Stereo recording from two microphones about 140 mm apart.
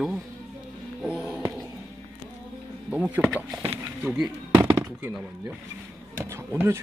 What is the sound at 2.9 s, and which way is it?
Speech, 15° right (ahead or behind).